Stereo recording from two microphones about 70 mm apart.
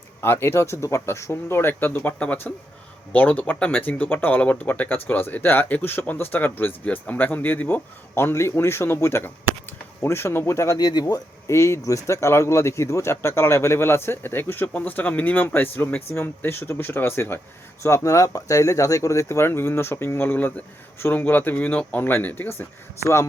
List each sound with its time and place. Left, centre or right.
0.2 s speech: left
10.8 s speech: left
11.0 s speech: left
17.8 s speech: left